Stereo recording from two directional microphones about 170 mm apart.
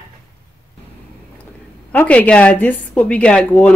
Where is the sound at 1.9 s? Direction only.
10° left (ahead or behind).